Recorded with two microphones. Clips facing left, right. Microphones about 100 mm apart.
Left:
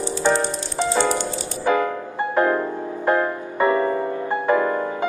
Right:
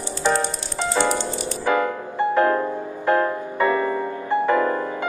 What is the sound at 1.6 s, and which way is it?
Music, 20° left (ahead or behind).